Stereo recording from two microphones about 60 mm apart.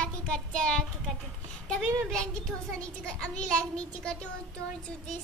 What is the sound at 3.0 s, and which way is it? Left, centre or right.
A child's voice, centre.